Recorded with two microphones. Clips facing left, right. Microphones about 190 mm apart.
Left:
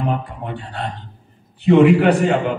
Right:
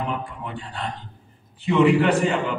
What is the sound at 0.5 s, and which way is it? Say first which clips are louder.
A man's voice: left 5 dB; 65° left (ahead or behind).